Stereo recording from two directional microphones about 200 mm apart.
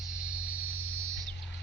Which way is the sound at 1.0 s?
15° right (ahead or behind).